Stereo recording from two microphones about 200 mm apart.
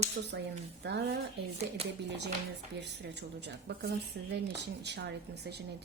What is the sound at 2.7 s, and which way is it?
Speech, 60° right (ahead or behind).